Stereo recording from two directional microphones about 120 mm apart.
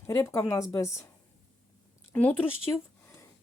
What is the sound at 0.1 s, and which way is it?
Speech, 25° left (ahead or behind).